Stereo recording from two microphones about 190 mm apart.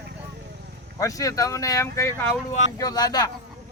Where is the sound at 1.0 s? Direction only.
15° left (ahead or behind).